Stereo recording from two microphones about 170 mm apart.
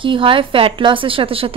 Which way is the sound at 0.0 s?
30° right (ahead or behind).